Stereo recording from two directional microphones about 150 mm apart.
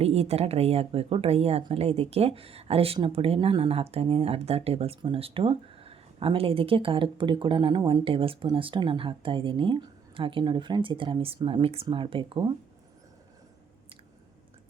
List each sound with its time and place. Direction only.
0.0 s speech: 45° right (ahead or behind)